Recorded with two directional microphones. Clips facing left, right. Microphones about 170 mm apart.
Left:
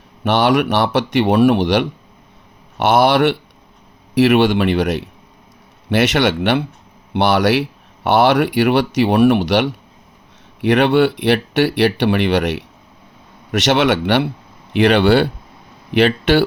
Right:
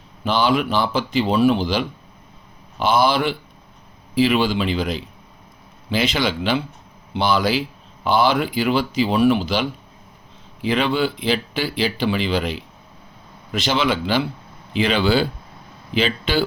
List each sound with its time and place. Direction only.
0.3 s speech: 75° left (ahead or behind)